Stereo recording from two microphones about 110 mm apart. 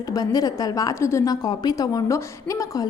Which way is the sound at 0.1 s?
35° left (ahead or behind).